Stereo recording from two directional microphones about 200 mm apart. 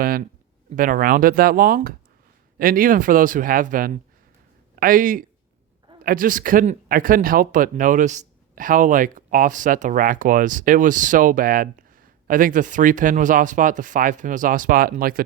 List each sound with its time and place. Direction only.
0.0 s a man's voice: 45° right (ahead or behind)